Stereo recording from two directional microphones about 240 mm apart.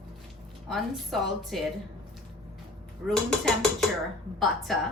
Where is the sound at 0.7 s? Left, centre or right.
Centre.